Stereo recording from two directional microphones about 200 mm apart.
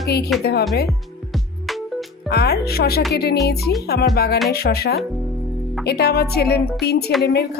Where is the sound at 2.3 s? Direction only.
55° left (ahead or behind).